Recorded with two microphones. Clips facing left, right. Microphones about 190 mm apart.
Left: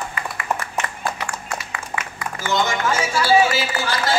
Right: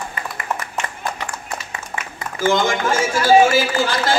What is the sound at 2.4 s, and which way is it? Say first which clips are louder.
Speech: right 4 dB; 50° right (ahead or behind).